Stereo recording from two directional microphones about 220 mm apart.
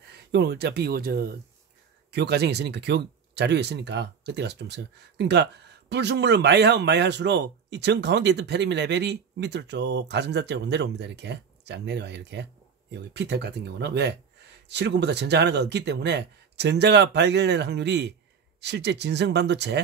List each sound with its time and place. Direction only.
0.1 s speech: 50° right (ahead or behind)